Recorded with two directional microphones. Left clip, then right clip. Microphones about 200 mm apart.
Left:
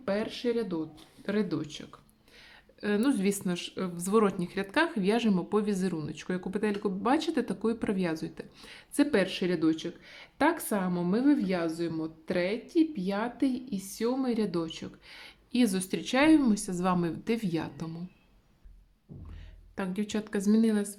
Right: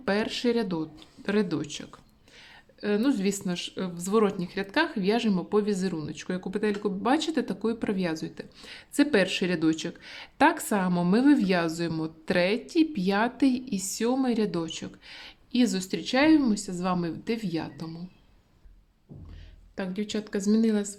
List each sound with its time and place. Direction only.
0.0 s speech: 25° right (ahead or behind)
2.8 s speech: centre (ahead or behind)
19.7 s speech: 5° left (ahead or behind)